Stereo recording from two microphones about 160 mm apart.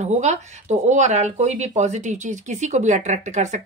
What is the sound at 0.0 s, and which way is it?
Speech, 45° right (ahead or behind).